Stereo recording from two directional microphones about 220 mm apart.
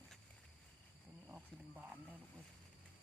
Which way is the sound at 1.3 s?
10° right (ahead or behind).